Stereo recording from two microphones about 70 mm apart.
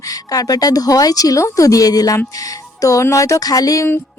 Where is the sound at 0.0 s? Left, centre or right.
Left.